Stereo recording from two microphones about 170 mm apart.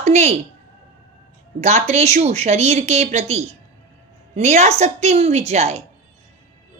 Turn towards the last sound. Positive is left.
turn(degrees=-40)  # may be behind; listen again after turning